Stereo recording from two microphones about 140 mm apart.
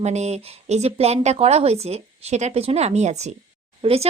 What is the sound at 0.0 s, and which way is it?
Speech, 55° right (ahead or behind).